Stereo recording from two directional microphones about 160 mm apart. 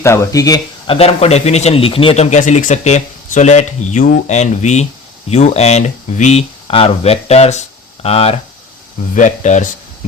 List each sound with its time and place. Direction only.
0.0 s speech: 15° left (ahead or behind)
0.9 s a man's voice: 40° left (ahead or behind)
9.1 s a man's voice: 50° left (ahead or behind)